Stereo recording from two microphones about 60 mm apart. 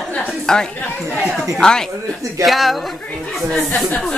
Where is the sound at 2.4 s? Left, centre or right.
Centre.